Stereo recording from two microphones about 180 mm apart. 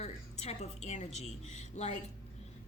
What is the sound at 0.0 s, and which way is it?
A woman's voice, 35° left (ahead or behind).